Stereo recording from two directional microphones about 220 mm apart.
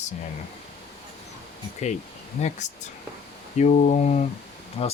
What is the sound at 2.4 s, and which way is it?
Speech, 30° left (ahead or behind).